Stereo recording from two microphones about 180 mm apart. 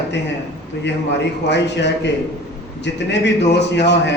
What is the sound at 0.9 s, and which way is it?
A man's voice, 75° left (ahead or behind).